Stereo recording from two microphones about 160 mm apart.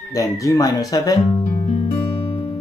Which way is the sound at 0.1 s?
20° left (ahead or behind).